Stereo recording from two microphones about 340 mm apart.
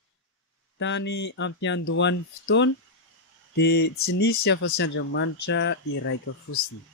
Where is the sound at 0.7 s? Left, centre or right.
Left.